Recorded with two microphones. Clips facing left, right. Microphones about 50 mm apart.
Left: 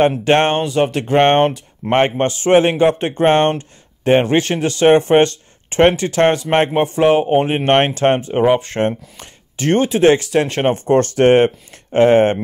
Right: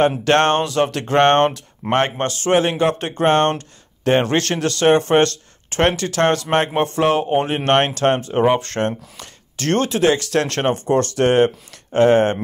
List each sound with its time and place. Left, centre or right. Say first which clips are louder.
0.2 s speech: left 1 dB; centre
8.4 s speech: left 2 dB; centre
10.0 s speech: left 6 dB; left
10.3 s speech: left 3 dB; centre
10.7 s speech: left 4 dB; left